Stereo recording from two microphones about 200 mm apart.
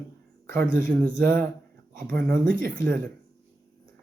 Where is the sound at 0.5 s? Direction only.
45° right (ahead or behind).